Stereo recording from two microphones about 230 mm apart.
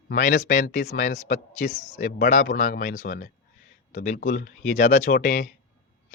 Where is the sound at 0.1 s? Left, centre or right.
Left.